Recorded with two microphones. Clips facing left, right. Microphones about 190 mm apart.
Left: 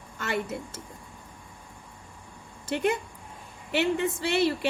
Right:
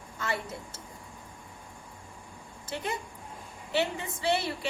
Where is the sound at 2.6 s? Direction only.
65° left (ahead or behind).